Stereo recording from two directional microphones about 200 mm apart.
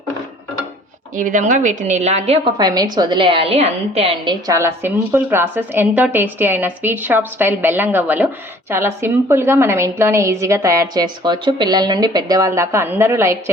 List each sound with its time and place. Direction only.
1.1 s a woman's voice: 40° right (ahead or behind)
4.4 s a woman's voice: 15° right (ahead or behind)